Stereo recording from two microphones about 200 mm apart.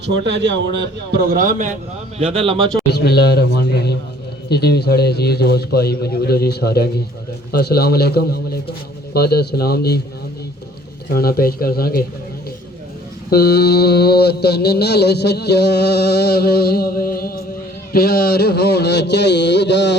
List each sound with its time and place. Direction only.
0.0 s a man's voice: 60° right (ahead or behind); by 2.6 s 25° right (ahead or behind)
2.9 s mantra: 55° left (ahead or behind)
11.1 s mantra: 50° left (ahead or behind)
13.3 s mantra: 50° left (ahead or behind)
17.9 s a sound: 50° left (ahead or behind)